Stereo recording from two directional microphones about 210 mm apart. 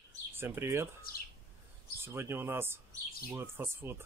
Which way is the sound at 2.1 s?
10° right (ahead or behind).